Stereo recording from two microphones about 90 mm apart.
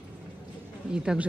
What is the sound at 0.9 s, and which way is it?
Speech, 10° right (ahead or behind).